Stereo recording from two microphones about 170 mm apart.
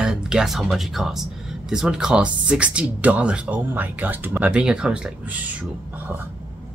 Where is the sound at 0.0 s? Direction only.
5° right (ahead or behind).